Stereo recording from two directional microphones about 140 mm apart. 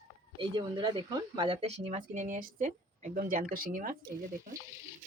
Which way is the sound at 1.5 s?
45° right (ahead or behind).